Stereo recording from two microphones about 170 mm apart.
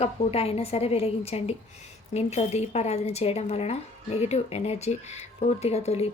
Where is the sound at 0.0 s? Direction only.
35° left (ahead or behind).